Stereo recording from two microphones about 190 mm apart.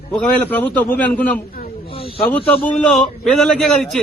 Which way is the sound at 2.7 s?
Centre (ahead or behind).